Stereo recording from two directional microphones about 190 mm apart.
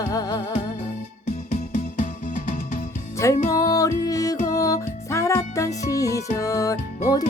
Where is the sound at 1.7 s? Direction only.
45° left (ahead or behind).